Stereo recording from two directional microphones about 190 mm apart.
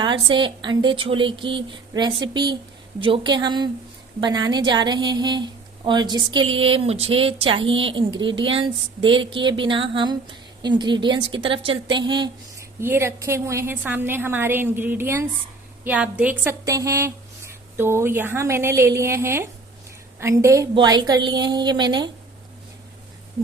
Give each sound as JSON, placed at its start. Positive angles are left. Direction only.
{"t": 0.0, "sound": "speech", "side_deg": -25}
{"t": 12.8, "sound": "a woman's voice", "side_deg": -10}